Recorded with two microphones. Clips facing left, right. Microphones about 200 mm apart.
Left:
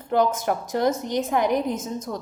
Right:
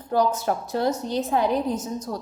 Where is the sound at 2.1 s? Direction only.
50° left (ahead or behind).